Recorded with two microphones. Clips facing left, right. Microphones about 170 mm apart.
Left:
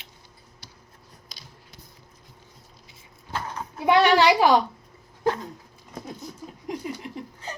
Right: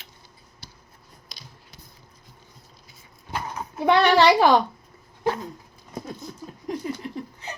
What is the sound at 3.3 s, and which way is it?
Dog, 10° right (ahead or behind).